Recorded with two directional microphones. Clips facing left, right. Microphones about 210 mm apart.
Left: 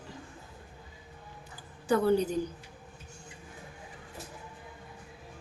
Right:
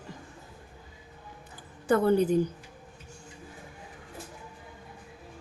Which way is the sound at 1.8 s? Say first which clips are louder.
Right 3 dB; 55° right (ahead or behind).